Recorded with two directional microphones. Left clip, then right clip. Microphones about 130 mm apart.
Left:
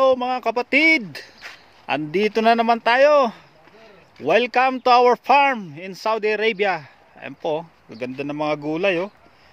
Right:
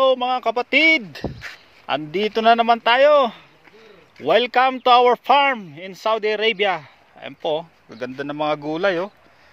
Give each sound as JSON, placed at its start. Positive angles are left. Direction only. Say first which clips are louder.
{"t": 0.0, "sound": "speech", "louder": "right 1 dB", "side_deg": 30}